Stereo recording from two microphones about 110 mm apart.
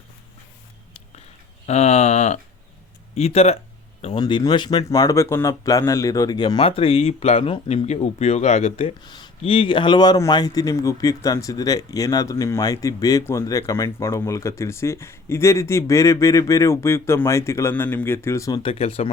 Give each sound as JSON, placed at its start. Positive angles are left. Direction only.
{"t": 1.6, "sound": "speech", "side_deg": 80}
{"t": 3.2, "sound": "speech", "side_deg": 75}
{"t": 4.2, "sound": "speech", "side_deg": 40}
{"t": 4.9, "sound": "speech", "side_deg": 30}
{"t": 6.6, "sound": "speech", "side_deg": 60}
{"t": 7.9, "sound": "speech", "side_deg": 80}
{"t": 9.0, "sound": "speech", "side_deg": 40}
{"t": 9.4, "sound": "speech", "side_deg": 50}
{"t": 18.6, "sound": "speech", "side_deg": 60}